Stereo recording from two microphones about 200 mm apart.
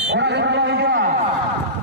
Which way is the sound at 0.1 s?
60° right (ahead or behind).